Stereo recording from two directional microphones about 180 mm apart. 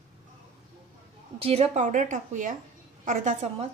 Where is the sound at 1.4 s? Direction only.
35° right (ahead or behind).